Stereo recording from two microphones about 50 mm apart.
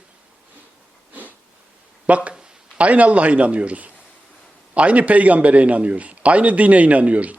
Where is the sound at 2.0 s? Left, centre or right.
Right.